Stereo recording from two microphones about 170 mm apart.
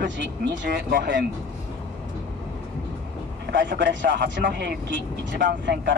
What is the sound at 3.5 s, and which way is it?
Speech, 90° right.